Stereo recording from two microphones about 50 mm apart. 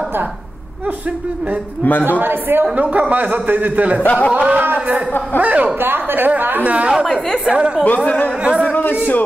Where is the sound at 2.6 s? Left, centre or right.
Right.